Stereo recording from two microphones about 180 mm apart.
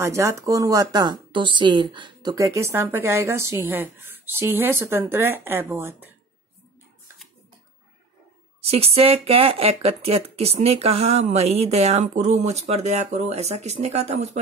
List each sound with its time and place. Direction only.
0.0 s a woman's voice: 15° right (ahead or behind)
8.5 s speech: 35° right (ahead or behind)